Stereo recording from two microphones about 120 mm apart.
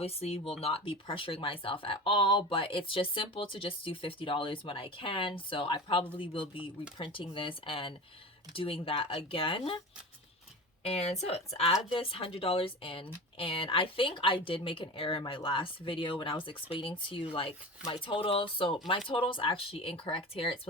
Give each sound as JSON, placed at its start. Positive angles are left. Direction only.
{"t": 0.0, "sound": "speech", "side_deg": 55}
{"t": 10.8, "sound": "speech", "side_deg": 60}